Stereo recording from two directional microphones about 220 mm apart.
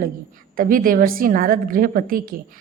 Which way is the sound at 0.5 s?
40° right (ahead or behind).